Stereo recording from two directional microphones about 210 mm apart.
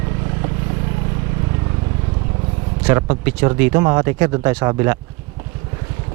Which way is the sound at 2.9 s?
15° right (ahead or behind).